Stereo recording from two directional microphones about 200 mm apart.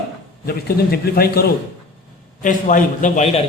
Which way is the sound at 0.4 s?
50° left (ahead or behind).